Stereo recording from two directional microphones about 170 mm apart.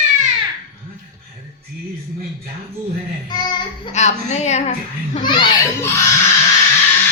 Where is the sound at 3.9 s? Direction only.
40° left (ahead or behind).